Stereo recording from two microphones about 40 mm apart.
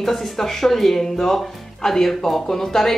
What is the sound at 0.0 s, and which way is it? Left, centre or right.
Speech, centre.